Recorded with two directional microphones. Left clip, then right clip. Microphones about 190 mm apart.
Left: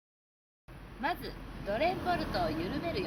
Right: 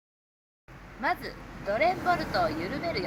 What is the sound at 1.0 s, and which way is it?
Speech, 10° right (ahead or behind).